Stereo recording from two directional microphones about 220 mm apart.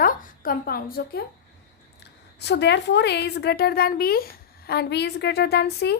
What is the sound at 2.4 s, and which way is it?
A woman's voice, 50° left (ahead or behind).